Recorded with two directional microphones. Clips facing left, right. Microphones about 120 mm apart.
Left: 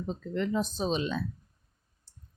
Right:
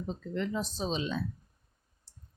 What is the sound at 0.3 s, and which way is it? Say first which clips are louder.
Speech: left 4 dB; 55° left (ahead or behind).